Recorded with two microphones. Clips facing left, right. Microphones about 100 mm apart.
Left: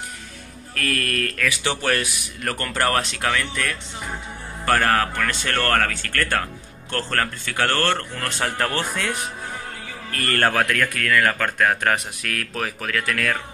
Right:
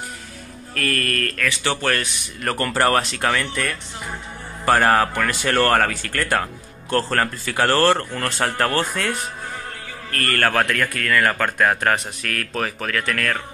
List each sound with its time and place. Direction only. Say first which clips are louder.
0.7 s a man's voice: right 1 dB; centre (ahead or behind)
2.4 s a man's voice: right 4 dB; centre (ahead or behind)
10.2 s a man's voice: even; 25° left (ahead or behind)
10.5 s a man's voice: right 1 dB; centre (ahead or behind)